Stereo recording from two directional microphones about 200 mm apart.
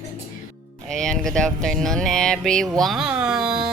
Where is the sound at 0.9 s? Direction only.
5° left (ahead or behind).